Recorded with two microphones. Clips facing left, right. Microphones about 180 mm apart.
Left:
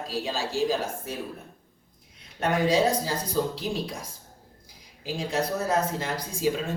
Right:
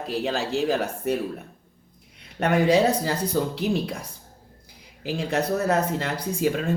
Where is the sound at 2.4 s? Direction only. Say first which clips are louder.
Right 4 dB; 65° right (ahead or behind).